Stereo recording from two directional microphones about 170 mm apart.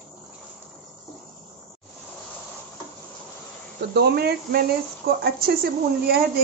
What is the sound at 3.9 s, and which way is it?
A woman's voice, 70° right (ahead or behind).